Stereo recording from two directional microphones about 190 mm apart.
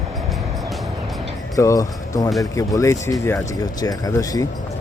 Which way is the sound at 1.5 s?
20° left (ahead or behind).